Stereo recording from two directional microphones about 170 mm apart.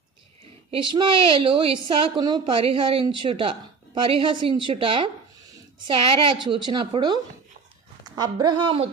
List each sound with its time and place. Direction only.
0.7 s a woman's voice: 30° right (ahead or behind)